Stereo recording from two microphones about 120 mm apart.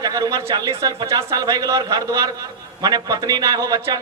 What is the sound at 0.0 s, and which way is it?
A man's voice, 30° right (ahead or behind).